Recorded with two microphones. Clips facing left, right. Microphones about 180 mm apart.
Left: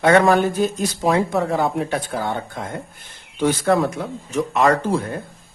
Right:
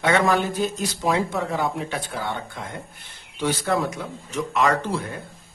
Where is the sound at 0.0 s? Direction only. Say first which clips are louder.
Left 6 dB; 50° left (ahead or behind).